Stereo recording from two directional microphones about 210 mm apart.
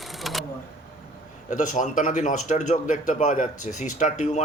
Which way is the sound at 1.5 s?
35° left (ahead or behind).